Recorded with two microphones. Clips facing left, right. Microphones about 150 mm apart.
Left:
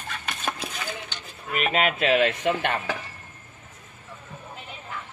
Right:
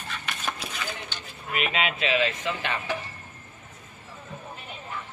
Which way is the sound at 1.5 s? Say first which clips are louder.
Left 4 dB; 45° left (ahead or behind).